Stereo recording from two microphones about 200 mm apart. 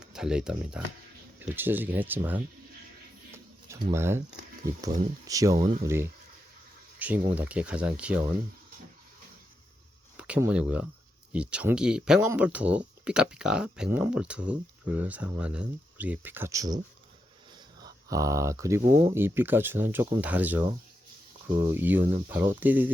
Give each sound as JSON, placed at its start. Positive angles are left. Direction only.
{"t": 0.0, "sound": "speech", "side_deg": -5}
{"t": 3.3, "sound": "a sound", "side_deg": -15}
{"t": 5.2, "sound": "speech", "side_deg": -15}
{"t": 10.2, "sound": "speech", "side_deg": -5}
{"t": 17.8, "sound": "speech", "side_deg": -15}